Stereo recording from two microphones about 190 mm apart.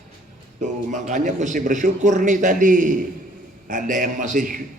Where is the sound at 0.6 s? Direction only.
40° right (ahead or behind).